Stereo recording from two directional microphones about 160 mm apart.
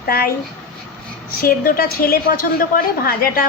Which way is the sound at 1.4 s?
65° left (ahead or behind).